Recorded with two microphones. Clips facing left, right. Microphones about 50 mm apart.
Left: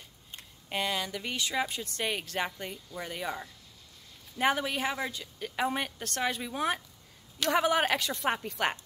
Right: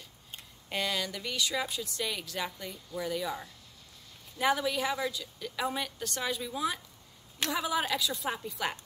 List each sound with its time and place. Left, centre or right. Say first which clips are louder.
0.7 s speech: left 1 dB; centre
1.2 s a woman's voice: left 1 dB; left
4.4 s a woman's voice: even; left